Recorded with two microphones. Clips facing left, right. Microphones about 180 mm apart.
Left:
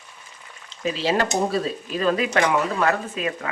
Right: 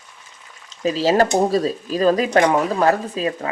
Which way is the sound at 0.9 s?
40° right (ahead or behind).